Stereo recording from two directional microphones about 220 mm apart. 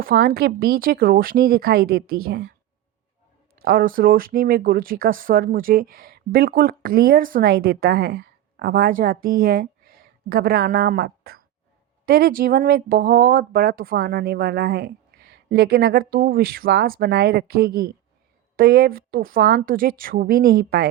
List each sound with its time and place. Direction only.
0.0 s speech: 45° right (ahead or behind)
3.5 s speech: 40° right (ahead or behind)